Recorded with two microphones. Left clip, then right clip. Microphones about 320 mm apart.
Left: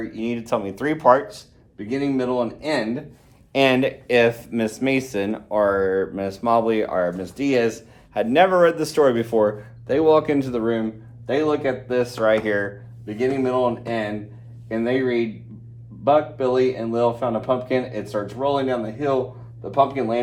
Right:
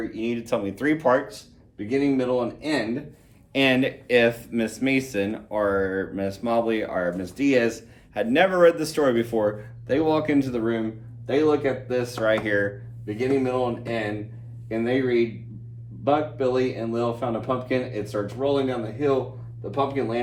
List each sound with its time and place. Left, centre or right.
0.1 s speech: centre